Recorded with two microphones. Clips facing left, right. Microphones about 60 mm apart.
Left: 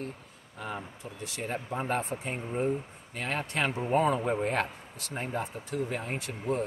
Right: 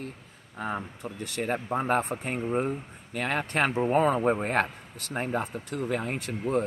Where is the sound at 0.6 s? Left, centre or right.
Right.